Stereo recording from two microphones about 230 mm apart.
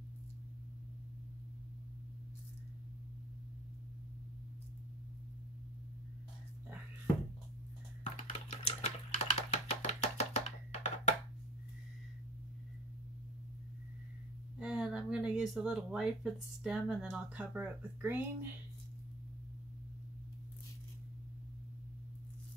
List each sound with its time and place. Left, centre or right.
8.0 s typewriter: left
14.6 s a sound: centre
16.6 s speech: centre